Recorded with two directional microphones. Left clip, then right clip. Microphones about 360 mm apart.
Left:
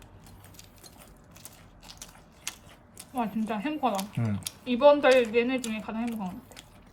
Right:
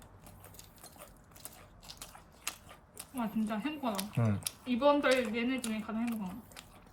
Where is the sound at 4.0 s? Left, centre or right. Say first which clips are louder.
Left 2 dB; centre.